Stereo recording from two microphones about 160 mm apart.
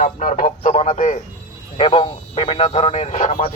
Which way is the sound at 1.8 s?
35° left (ahead or behind).